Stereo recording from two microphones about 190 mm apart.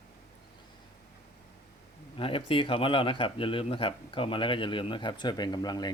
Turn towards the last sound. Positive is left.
turn(degrees=20)  # may be behind; listen again after turning